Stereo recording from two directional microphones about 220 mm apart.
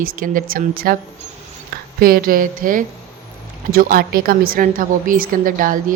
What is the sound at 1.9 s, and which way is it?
A woman's voice, 40° right (ahead or behind).